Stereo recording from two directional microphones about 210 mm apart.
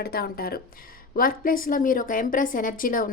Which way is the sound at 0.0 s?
45° left (ahead or behind).